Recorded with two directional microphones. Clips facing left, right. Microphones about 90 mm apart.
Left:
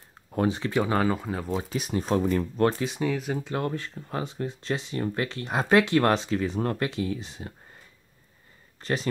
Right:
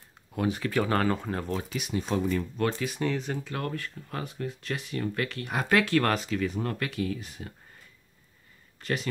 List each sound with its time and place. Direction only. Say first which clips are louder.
0.5 s speech: even; 25° left (ahead or behind)
0.9 s speech: left 1 dB; 5° left (ahead or behind)
1.6 s speech: left 3 dB; 35° left (ahead or behind)
3.0 s speech: left 1 dB; 5° left (ahead or behind)
3.3 s speech: left 4 dB; 25° left (ahead or behind)
8.8 s speech: left 3 dB; 30° left (ahead or behind)